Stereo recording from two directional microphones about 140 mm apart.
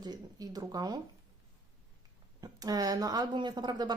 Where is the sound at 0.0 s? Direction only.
30° right (ahead or behind).